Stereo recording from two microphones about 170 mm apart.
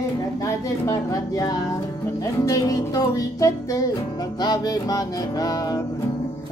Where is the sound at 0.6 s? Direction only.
20° left (ahead or behind).